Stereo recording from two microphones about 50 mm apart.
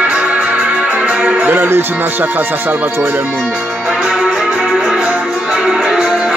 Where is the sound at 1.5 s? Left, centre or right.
Right.